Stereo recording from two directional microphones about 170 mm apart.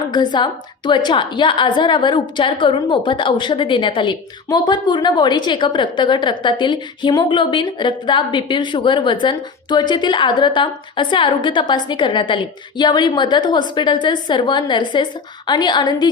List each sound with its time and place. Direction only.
0.1 s a woman's voice: 25° left (ahead or behind)